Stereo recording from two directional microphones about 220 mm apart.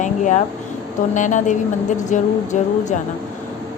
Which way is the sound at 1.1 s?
35° left (ahead or behind).